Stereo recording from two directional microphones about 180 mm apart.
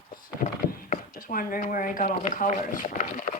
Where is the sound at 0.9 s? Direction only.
50° left (ahead or behind).